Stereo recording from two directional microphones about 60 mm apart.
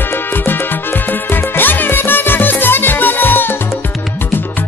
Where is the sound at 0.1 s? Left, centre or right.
Left.